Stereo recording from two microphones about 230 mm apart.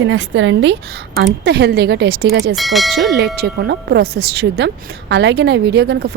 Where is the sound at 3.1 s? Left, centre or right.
Right.